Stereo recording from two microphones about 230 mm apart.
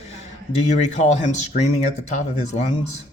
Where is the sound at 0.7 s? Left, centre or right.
Left.